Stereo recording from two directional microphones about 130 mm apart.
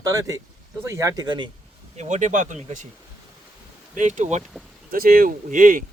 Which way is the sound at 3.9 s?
70° right (ahead or behind).